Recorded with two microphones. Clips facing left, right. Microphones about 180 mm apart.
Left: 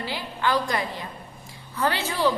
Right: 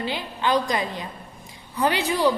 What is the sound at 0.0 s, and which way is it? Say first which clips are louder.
A woman's voice: right 1 dB; 20° right (ahead or behind).